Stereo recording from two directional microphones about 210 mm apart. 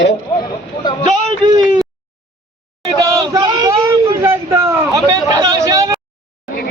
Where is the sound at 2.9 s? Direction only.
15° right (ahead or behind).